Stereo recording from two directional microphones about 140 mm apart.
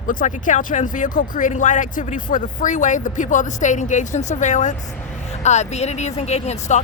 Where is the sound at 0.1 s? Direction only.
70° left (ahead or behind).